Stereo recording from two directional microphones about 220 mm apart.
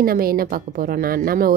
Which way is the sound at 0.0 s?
40° right (ahead or behind).